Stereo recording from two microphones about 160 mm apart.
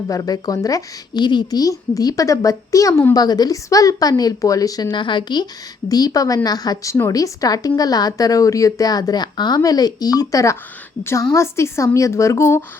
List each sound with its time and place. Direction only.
0.1 s a woman's voice: 25° left (ahead or behind)